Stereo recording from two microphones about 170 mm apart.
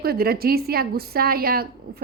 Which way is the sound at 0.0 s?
65° right (ahead or behind).